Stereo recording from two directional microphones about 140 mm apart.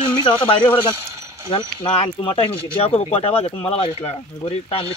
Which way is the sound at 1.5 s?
40° left (ahead or behind).